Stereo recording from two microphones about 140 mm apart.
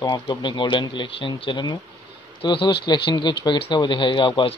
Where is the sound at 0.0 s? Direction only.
35° left (ahead or behind).